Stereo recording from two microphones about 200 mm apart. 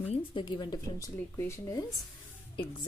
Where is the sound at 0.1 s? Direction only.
25° left (ahead or behind).